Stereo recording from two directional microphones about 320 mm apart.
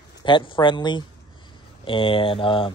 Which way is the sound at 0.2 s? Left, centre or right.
Centre.